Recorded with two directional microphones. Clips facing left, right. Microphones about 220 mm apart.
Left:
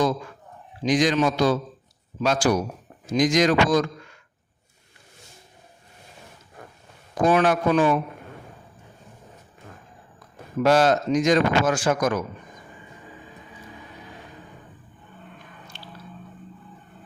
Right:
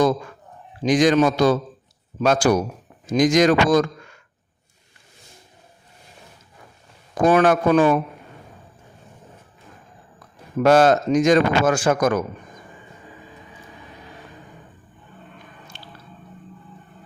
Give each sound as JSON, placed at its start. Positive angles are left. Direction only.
{"t": 0.8, "sound": "speech", "side_deg": -50}
{"t": 7.2, "sound": "speech", "side_deg": -50}
{"t": 10.6, "sound": "speech", "side_deg": -50}